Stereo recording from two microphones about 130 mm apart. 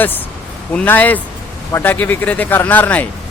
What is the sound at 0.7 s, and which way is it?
A man's voice, 15° left (ahead or behind).